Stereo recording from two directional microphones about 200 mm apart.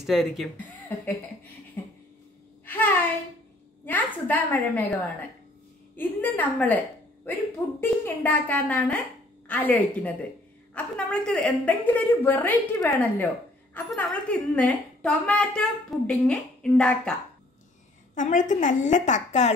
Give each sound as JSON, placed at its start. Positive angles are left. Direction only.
{"t": 0.0, "sound": "speech", "side_deg": 0}
{"t": 1.8, "sound": "a sound", "side_deg": 10}
{"t": 3.8, "sound": "a woman's voice", "side_deg": 10}
{"t": 7.8, "sound": "a woman's voice", "side_deg": 10}
{"t": 18.1, "sound": "a woman's voice", "side_deg": 40}